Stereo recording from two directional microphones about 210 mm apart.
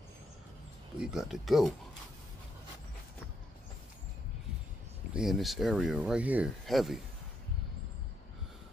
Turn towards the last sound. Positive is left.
turn(degrees=0)  # may be behind; listen again after turning